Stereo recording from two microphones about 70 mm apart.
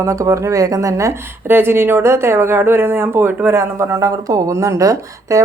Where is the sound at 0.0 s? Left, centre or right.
Right.